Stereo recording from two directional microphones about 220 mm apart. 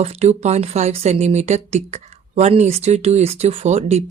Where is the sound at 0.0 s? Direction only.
30° right (ahead or behind).